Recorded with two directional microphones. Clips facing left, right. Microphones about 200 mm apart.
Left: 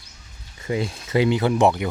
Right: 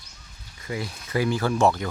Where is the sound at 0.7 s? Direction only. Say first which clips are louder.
Left 6 dB; 25° left (ahead or behind).